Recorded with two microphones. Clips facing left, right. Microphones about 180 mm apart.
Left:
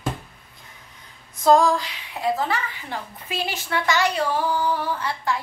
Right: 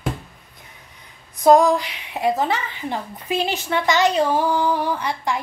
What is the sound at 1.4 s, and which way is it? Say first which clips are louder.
A woman's voice: right 3 dB; 20° right (ahead or behind).